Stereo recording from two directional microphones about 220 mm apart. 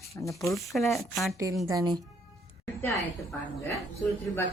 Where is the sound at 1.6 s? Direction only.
15° right (ahead or behind).